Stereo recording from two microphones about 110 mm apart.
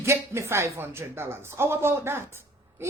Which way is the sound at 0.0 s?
25° right (ahead or behind).